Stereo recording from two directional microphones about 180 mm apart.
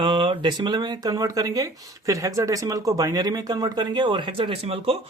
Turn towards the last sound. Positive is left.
turn(degrees=-30)  # may be behind; listen again after turning